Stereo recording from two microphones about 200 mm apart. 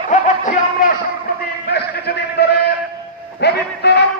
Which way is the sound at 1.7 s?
55° left (ahead or behind).